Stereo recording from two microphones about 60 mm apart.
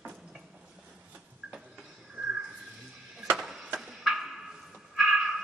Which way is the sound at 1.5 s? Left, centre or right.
Centre.